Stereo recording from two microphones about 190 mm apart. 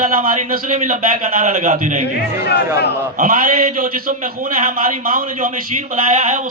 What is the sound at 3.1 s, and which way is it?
A man's voice, 45° right (ahead or behind).